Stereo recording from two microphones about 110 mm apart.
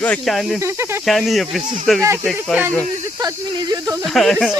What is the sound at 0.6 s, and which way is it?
Speech, 25° right (ahead or behind).